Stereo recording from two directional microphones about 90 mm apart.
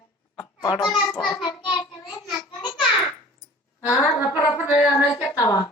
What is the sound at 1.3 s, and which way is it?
Child singing, 55° left (ahead or behind).